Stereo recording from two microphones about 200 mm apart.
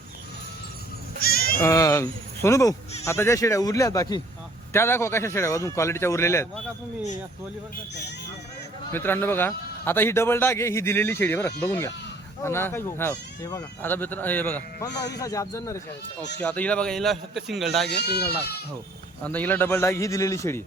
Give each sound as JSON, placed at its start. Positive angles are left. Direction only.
{"t": 1.2, "sound": "bleat", "side_deg": 50}
{"t": 1.5, "sound": "speech", "side_deg": 15}
{"t": 8.9, "sound": "a man's voice", "side_deg": 10}
{"t": 17.8, "sound": "speech", "side_deg": 55}
{"t": 19.2, "sound": "speech", "side_deg": 10}